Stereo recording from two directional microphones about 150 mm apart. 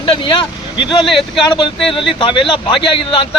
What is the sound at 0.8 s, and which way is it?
Speech, 30° left (ahead or behind).